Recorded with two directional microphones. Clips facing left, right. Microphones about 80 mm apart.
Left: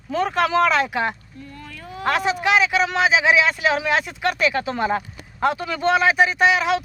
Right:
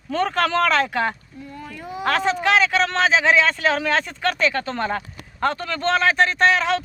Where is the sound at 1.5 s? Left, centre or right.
Centre.